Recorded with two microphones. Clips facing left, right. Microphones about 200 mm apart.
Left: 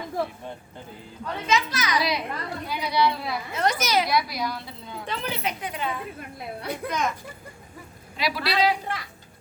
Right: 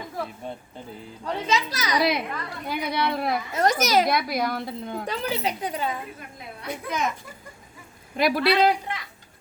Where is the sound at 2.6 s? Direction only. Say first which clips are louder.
Left 2 dB; 55° right (ahead or behind).